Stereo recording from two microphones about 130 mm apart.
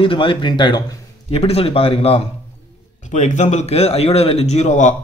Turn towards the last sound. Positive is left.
turn(degrees=65)  # may be behind; listen again after turning